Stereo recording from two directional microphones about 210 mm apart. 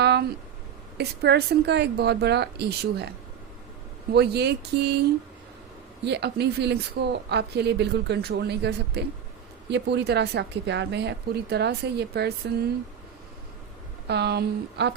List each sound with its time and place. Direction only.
0.0 s a sound: 50° right (ahead or behind)
0.9 s speech: 50° right (ahead or behind)
4.1 s speech: 50° right (ahead or behind)
6.1 s speech: 55° right (ahead or behind)
14.1 s speech: 50° right (ahead or behind)